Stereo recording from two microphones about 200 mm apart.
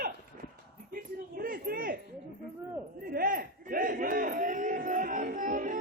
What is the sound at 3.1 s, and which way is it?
Battle cry, 45° right (ahead or behind).